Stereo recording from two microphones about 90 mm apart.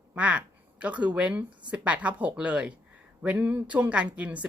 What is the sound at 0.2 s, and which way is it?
Speech, 15° right (ahead or behind).